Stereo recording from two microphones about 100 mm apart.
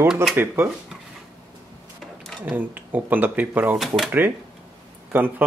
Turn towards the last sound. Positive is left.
turn(degrees=-20)  # may be behind; listen again after turning